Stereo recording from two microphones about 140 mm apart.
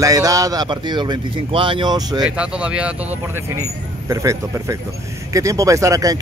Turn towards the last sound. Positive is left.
turn(degrees=-25)  # may be behind; listen again after turning